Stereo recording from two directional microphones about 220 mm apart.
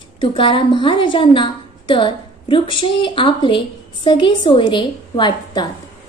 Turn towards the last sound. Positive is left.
turn(degrees=20)  # may be behind; listen again after turning